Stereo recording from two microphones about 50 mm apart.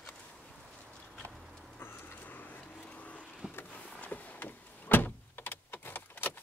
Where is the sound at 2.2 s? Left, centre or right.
Left.